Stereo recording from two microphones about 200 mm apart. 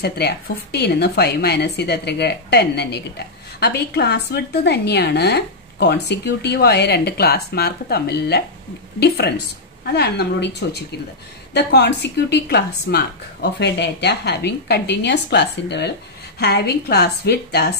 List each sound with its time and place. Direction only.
0.0 s a woman's voice: 50° left (ahead or behind)